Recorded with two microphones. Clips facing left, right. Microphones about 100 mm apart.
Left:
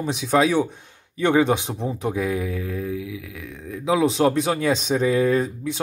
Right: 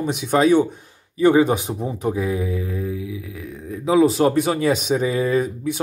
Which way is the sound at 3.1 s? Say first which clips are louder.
Right 2 dB; 30° right (ahead or behind).